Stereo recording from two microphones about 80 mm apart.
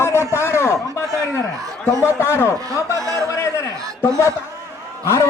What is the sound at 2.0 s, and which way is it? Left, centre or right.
Speech, left.